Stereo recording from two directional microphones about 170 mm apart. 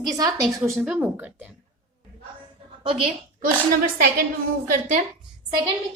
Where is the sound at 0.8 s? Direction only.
10° right (ahead or behind).